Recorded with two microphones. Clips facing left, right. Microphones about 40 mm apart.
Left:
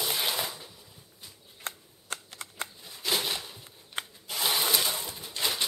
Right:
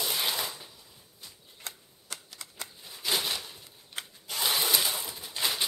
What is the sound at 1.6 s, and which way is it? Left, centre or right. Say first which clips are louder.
Shuffling cards: left 5 dB; left.